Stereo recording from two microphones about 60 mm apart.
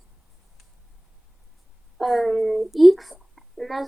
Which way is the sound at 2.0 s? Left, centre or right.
Centre.